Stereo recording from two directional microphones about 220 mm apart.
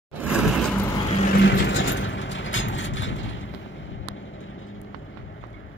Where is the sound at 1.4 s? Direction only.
50° left (ahead or behind).